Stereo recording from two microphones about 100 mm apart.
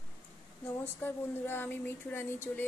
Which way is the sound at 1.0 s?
20° left (ahead or behind).